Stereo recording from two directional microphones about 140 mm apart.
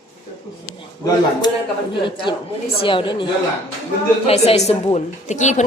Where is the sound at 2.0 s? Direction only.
35° left (ahead or behind).